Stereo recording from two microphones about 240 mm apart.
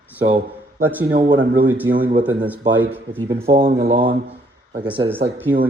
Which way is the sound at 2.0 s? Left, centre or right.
Right.